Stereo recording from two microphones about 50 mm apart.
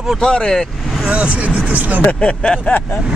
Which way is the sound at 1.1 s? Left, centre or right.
Right.